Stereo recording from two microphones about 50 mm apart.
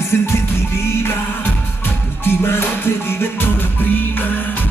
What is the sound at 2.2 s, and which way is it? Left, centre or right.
Music, left.